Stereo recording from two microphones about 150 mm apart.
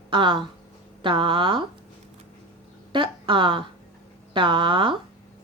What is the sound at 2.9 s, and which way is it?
A woman's voice, 35° right (ahead or behind).